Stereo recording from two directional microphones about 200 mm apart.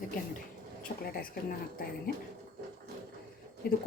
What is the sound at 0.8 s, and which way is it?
Speech, 50° left (ahead or behind).